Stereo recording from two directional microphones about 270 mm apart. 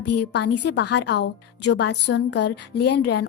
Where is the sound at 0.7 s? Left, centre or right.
Left.